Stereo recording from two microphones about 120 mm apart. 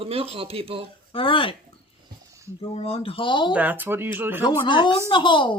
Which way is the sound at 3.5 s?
15° right (ahead or behind).